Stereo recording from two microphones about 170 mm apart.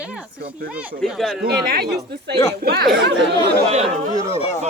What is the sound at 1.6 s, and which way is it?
Speech, 65° right (ahead or behind).